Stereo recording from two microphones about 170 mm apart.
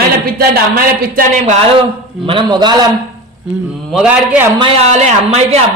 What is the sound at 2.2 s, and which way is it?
Speech, 30° right (ahead or behind).